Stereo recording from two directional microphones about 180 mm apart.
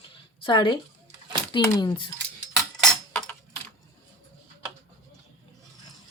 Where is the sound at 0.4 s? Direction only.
25° left (ahead or behind).